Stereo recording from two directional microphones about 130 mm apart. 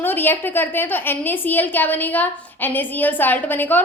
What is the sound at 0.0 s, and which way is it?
A woman's voice, 15° left (ahead or behind).